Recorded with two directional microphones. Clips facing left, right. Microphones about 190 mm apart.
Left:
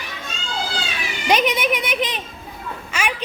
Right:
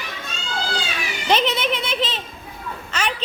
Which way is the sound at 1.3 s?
10° left (ahead or behind).